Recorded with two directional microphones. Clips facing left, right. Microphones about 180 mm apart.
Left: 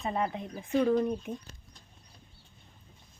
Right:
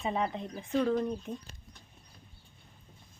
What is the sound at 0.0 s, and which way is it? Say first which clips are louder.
Speech: even; centre (ahead or behind).